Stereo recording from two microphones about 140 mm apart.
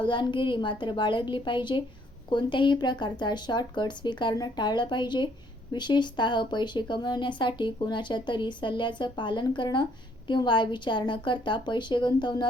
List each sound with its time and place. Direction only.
0.0 s speech: 35° left (ahead or behind)